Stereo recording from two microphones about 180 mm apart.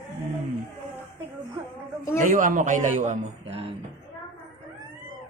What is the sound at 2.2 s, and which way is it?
Speech, 45° right (ahead or behind).